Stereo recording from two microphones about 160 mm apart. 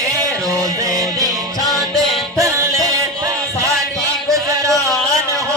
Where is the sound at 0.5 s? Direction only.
20° right (ahead or behind).